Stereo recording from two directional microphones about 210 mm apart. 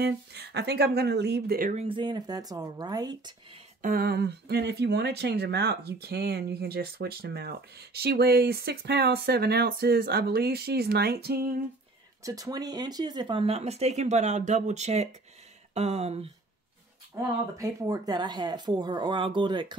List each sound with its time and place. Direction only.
0.0 s speech: 50° right (ahead or behind)
1.8 s speech: 25° right (ahead or behind)
3.8 s speech: 45° right (ahead or behind)
12.2 s speech: 15° right (ahead or behind); by 15.0 s 30° right (ahead or behind)
15.7 s a sound: 30° right (ahead or behind)
17.1 s speech: 15° right (ahead or behind)